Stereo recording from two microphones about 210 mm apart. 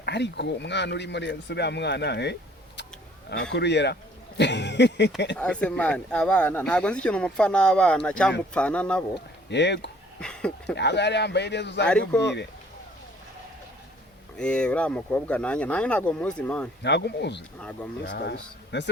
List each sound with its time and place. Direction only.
0.0 s speech: 55° left (ahead or behind)
3.5 s speech: 55° left (ahead or behind)
5.4 s speech: 5° left (ahead or behind)
9.5 s speech: 55° left (ahead or behind)
10.2 s a sound: 5° left (ahead or behind)
10.8 s speech: 55° left (ahead or behind)
11.9 s speech: 5° left (ahead or behind)
14.3 s speech: 5° left (ahead or behind)
16.8 s speech: 55° left (ahead or behind)
17.6 s speech: 5° left (ahead or behind)
18.1 s speech: 50° left (ahead or behind)